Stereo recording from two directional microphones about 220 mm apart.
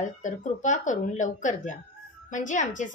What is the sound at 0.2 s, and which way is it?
A woman's voice, 35° left (ahead or behind).